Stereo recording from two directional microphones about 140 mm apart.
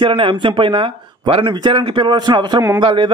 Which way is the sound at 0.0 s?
40° right (ahead or behind).